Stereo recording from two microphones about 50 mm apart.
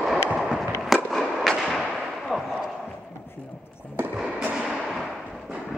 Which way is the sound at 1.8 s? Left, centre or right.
Centre.